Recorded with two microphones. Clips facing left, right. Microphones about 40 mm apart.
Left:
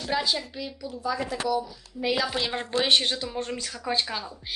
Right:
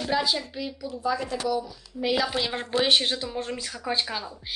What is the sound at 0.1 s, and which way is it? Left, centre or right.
A woman's voice, centre.